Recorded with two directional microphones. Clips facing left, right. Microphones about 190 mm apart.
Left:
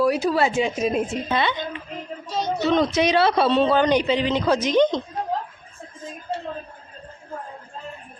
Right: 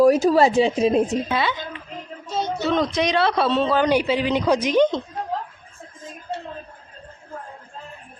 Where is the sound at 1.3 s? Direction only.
5° right (ahead or behind).